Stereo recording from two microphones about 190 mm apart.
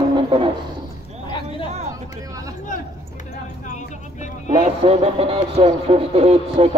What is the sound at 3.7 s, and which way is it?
Speech, 40° left (ahead or behind).